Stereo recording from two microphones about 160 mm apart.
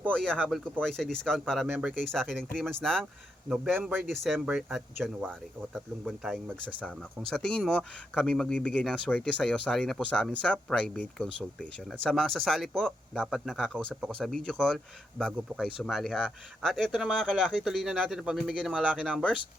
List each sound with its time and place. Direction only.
0.1 s speech: 5° left (ahead or behind)
3.5 s speech: 5° right (ahead or behind)
4.0 s speech: centre (ahead or behind)
4.4 s speech: 10° right (ahead or behind)
4.9 s speech: 5° left (ahead or behind)